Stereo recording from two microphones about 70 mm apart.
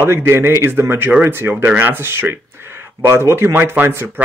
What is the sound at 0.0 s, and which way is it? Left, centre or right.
A man's voice, right.